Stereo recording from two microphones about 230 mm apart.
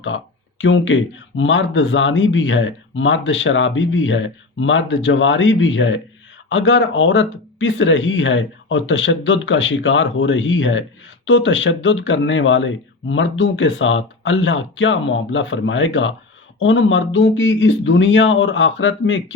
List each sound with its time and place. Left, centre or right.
0.6 s speech: left